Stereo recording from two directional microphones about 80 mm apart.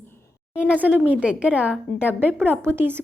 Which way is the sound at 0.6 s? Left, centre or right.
Centre.